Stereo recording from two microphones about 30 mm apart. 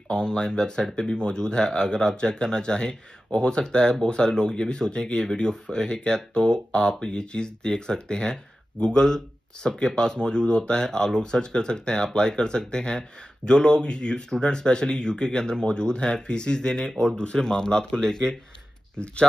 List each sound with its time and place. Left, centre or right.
0.1 s speech: left